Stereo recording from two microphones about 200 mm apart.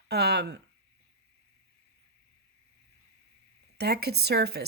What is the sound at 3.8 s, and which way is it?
Speech, 55° right (ahead or behind).